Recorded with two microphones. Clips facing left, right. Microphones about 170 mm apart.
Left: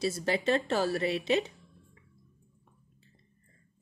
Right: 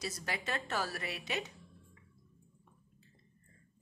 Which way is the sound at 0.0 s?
30° left (ahead or behind).